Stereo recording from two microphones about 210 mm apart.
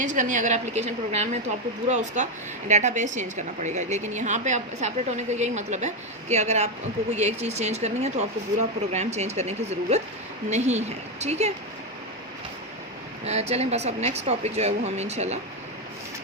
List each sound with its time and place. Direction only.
0.0 s a woman's voice: 35° right (ahead or behind)
13.2 s a woman's voice: 30° right (ahead or behind)